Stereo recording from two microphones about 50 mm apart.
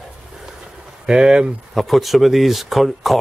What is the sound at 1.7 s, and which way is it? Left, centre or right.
Speech, centre.